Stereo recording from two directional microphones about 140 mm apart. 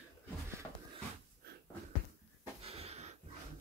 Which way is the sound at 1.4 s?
90° right.